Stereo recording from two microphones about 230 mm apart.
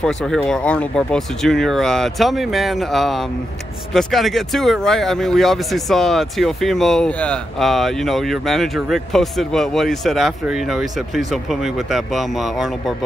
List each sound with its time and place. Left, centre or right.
0.0 s speech: centre